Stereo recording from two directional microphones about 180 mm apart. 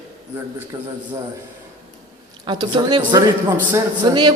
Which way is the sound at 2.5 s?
25° right (ahead or behind).